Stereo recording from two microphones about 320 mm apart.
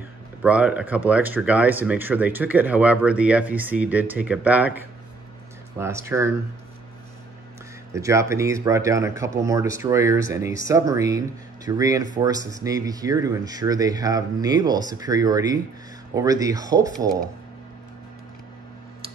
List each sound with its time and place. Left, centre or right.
0.4 s speech: centre
7.9 s speech: centre